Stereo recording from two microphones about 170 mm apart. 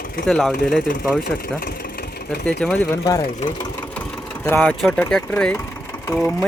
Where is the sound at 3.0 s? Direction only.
25° left (ahead or behind).